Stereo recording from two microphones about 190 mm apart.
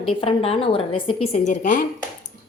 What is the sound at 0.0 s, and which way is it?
A woman's voice, 30° left (ahead or behind).